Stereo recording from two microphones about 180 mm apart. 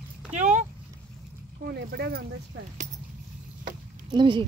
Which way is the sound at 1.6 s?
65° right (ahead or behind).